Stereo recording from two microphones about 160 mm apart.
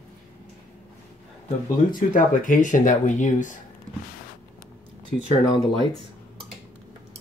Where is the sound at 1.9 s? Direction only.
55° left (ahead or behind).